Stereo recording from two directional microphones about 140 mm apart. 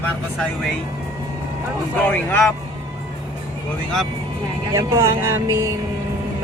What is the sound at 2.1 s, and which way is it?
Speech, 15° left (ahead or behind).